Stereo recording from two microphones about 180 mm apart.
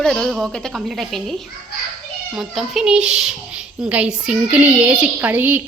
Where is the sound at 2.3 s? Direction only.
Centre (ahead or behind).